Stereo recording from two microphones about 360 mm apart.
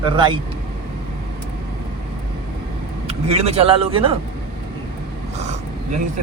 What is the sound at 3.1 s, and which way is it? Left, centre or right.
Speech, centre.